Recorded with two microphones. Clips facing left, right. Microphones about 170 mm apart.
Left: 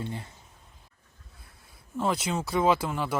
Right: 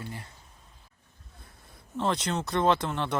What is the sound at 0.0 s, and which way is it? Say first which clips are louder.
Speech: left 5 dB; 20° left (ahead or behind).